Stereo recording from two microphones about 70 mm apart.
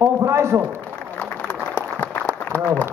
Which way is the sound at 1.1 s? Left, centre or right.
Left.